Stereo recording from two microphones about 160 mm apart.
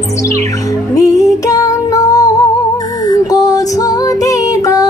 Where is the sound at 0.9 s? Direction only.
20° left (ahead or behind).